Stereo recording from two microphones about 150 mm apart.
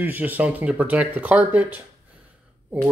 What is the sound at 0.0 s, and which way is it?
Speech, 10° right (ahead or behind).